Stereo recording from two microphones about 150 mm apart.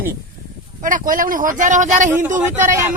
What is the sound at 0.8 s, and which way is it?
Speech, 65° right (ahead or behind).